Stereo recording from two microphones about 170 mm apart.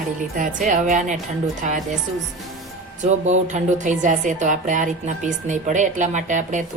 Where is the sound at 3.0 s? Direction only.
45° right (ahead or behind).